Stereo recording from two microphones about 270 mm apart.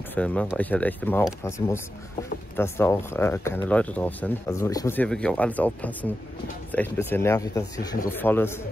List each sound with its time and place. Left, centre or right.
0.1 s speech: centre